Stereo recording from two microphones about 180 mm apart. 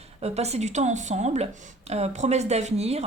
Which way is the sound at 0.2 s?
35° right (ahead or behind).